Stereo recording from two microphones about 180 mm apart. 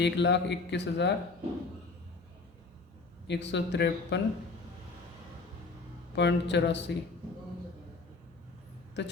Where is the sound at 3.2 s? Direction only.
75° left (ahead or behind).